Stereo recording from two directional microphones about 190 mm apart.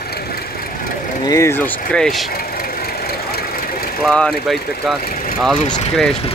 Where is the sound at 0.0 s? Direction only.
55° left (ahead or behind).